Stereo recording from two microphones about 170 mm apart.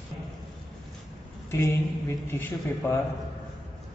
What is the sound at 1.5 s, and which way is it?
A man's voice, 15° left (ahead or behind).